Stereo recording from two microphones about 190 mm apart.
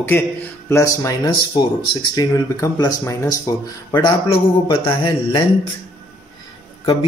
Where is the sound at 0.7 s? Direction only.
15° left (ahead or behind).